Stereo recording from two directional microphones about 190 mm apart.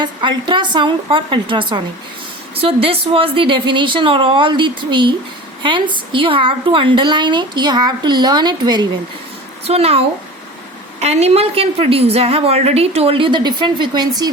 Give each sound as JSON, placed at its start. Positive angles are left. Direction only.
{"t": 0.0, "sound": "a woman's voice", "side_deg": -25}
{"t": 9.6, "sound": "a woman's voice", "side_deg": -30}